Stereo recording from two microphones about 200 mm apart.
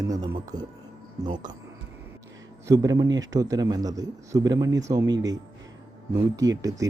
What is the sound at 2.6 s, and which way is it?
A man's voice, 20° right (ahead or behind).